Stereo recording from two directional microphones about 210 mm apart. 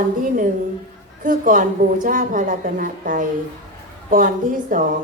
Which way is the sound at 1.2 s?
40° right (ahead or behind).